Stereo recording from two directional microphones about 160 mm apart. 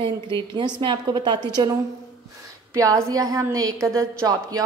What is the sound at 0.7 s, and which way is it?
Speech, 30° right (ahead or behind).